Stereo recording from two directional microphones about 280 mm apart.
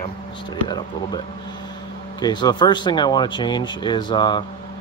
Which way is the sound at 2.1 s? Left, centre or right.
Centre.